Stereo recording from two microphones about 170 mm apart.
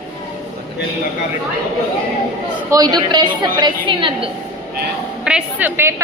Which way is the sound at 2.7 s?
25° right (ahead or behind).